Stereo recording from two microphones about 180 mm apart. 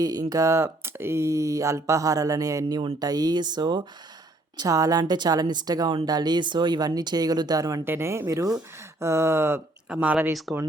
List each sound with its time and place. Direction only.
0.0 s speech: 20° right (ahead or behind)